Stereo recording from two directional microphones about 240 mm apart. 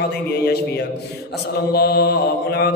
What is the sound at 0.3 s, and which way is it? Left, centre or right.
Mantra, left.